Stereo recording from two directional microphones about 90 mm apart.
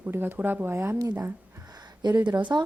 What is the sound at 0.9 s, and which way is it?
Speech, 35° right (ahead or behind).